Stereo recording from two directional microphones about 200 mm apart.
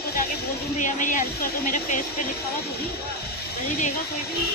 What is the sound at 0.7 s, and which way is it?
A woman's voice, 40° left (ahead or behind).